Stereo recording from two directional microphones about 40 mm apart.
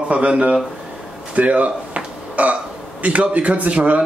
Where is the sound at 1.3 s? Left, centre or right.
Right.